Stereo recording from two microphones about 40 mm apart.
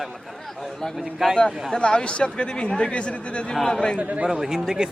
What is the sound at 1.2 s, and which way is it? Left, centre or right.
Speech, centre.